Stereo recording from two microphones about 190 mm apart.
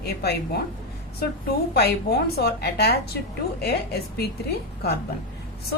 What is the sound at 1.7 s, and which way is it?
A woman's voice, 55° left (ahead or behind).